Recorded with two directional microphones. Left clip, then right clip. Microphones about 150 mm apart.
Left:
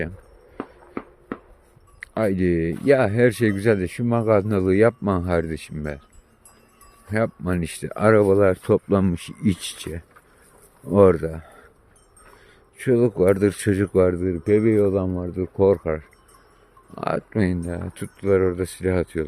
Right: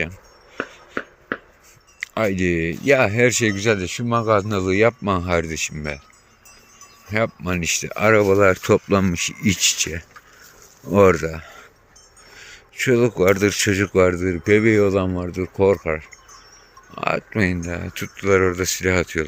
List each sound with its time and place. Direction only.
0.5 s a sound: 90° left
2.0 s speech: 35° left (ahead or behind)
7.1 s speech: 35° left (ahead or behind)
8.2 s speech: 15° left (ahead or behind)
10.9 s speech: 20° left (ahead or behind)
12.7 s speech: 20° left (ahead or behind)
15.5 s speech: 30° left (ahead or behind)